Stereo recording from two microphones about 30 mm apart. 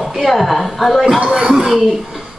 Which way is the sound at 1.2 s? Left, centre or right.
Right.